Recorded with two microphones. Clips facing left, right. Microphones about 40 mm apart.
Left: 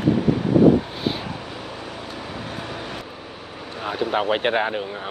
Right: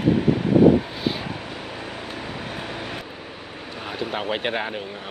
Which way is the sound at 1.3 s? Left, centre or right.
Centre.